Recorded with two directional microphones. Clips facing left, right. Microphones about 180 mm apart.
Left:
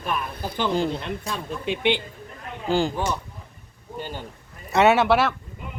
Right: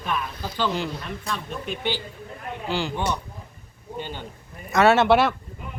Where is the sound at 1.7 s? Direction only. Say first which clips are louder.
Left 6 dB; 65° left (ahead or behind).